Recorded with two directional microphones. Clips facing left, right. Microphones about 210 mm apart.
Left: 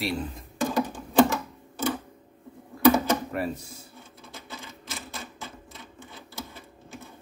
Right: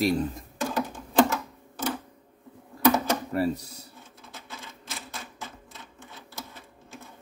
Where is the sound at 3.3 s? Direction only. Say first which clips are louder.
Right 4 dB; 40° right (ahead or behind).